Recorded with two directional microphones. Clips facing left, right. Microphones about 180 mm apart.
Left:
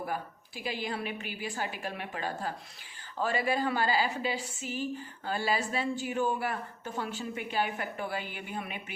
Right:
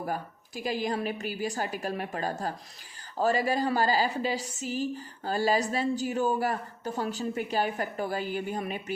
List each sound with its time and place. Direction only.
0.0 s a woman's voice: 40° right (ahead or behind)